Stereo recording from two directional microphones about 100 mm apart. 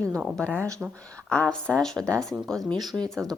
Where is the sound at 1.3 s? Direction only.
10° left (ahead or behind).